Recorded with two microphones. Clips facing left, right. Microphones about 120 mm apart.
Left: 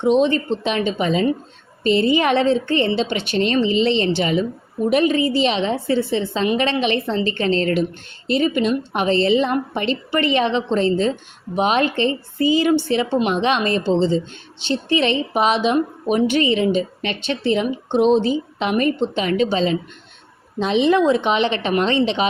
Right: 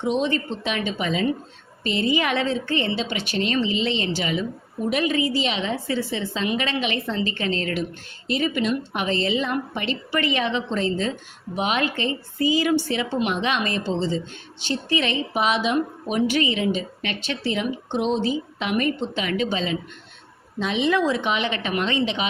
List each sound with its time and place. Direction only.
0.0 s a woman's voice: 25° left (ahead or behind)